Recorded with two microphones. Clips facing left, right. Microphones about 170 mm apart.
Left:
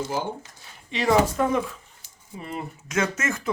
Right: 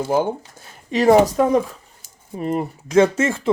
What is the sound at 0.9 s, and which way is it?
Speech, 45° right (ahead or behind).